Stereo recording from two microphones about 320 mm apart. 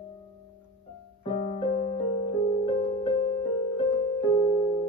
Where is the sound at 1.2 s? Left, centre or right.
Centre.